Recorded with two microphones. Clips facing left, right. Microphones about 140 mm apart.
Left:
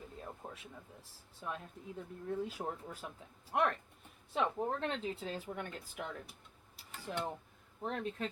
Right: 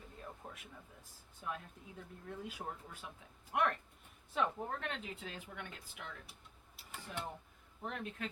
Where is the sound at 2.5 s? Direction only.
35° left (ahead or behind).